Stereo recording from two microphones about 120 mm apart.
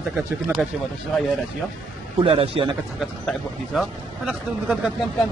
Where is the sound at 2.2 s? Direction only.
50° right (ahead or behind).